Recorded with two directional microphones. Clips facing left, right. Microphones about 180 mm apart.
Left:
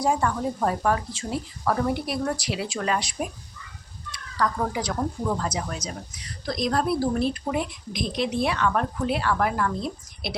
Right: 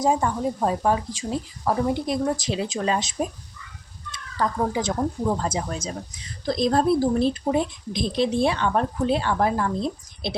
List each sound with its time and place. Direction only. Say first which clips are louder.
0.0 s speech: right 2 dB; 20° right (ahead or behind)